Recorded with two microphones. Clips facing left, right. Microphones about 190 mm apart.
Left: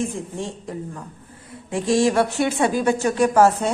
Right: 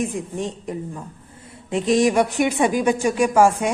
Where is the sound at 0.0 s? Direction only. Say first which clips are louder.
Right 2 dB; 15° right (ahead or behind).